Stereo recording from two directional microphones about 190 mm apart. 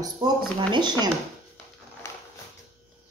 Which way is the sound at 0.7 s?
20° right (ahead or behind).